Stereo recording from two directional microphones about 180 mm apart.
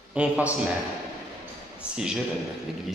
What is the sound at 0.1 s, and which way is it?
Speech, 5° right (ahead or behind).